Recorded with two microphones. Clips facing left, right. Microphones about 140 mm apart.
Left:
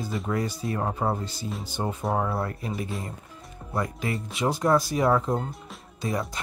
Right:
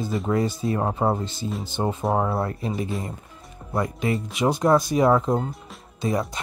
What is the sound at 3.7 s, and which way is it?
Speech, 20° right (ahead or behind).